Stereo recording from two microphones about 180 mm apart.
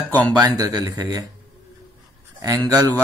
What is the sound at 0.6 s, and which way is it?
Speech, 20° right (ahead or behind).